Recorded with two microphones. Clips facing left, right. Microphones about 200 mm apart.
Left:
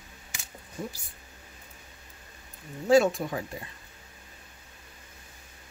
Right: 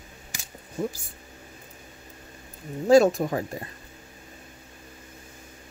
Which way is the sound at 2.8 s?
40° right (ahead or behind).